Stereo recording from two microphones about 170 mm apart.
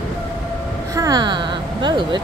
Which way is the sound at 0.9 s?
20° right (ahead or behind).